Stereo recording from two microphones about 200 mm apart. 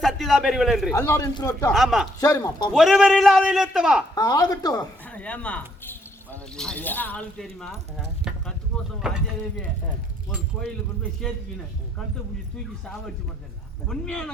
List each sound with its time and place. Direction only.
0.0 s a man's voice: centre (ahead or behind)
0.9 s speech: 15° left (ahead or behind)
1.7 s a man's voice: centre (ahead or behind)
2.2 s a woman's voice: 20° left (ahead or behind)
2.7 s a man's voice: centre (ahead or behind)
4.1 s a woman's voice: 20° left (ahead or behind)
5.1 s speech: 5° left (ahead or behind)
13.8 s a man's voice: 5° left (ahead or behind)